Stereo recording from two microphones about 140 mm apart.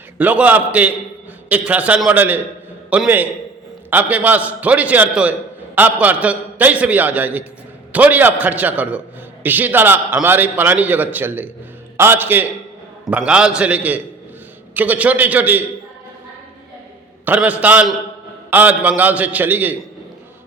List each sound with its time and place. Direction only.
0.2 s a man's voice: 10° right (ahead or behind)
17.2 s a man's voice: 10° right (ahead or behind)